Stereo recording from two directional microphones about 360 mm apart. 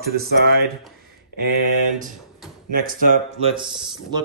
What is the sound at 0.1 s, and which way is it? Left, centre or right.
Speech, right.